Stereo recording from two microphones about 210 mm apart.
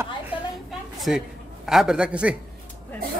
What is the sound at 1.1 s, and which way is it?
A man's voice, centre (ahead or behind).